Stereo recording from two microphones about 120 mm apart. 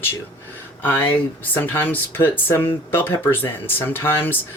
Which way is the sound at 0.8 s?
15° left (ahead or behind).